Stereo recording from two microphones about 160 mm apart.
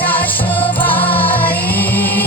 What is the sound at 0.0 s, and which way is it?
Music, 10° left (ahead or behind).